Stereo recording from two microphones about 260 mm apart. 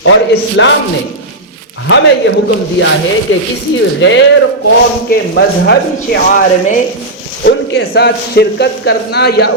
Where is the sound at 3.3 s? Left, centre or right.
Left.